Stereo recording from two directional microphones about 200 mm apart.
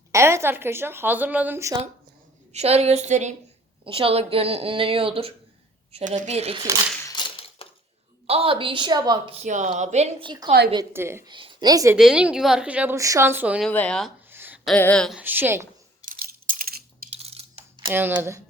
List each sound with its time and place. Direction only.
0.1 s a woman's voice: 15° right (ahead or behind)
2.5 s a woman's voice: 30° right (ahead or behind)
7.0 s crushing: 25° left (ahead or behind)
8.3 s a woman's voice: 30° right (ahead or behind)
10.9 s a woman's voice: 10° right (ahead or behind)
11.3 s a woman's voice: 25° right (ahead or behind)
11.9 s a woman's voice: 5° right (ahead or behind)
13.7 s speech: 5° left (ahead or behind)
14.3 s a sound: 10° right (ahead or behind)
14.7 s speech: 5° left (ahead or behind)
15.2 s a woman's voice: 10° right (ahead or behind)
16.0 s coin: 45° right (ahead or behind)
17.2 s coin: 30° right (ahead or behind)
17.9 s a woman's voice: 10° right (ahead or behind)